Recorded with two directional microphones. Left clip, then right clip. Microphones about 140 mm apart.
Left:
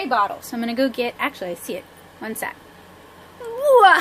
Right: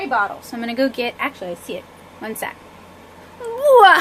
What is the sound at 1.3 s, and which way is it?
Speech, 30° left (ahead or behind).